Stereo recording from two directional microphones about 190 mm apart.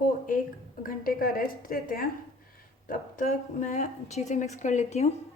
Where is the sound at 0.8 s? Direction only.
50° left (ahead or behind).